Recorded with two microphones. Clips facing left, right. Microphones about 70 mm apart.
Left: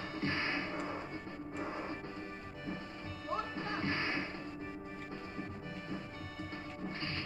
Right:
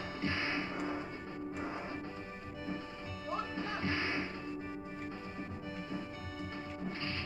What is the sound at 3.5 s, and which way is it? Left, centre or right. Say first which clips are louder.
Music: even; left.